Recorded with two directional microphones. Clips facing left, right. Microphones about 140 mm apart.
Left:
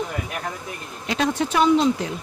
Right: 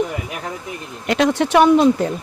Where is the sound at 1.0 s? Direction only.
70° right (ahead or behind); by 2.1 s 50° right (ahead or behind).